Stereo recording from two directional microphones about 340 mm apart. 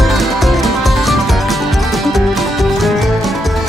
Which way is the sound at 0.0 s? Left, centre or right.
Centre.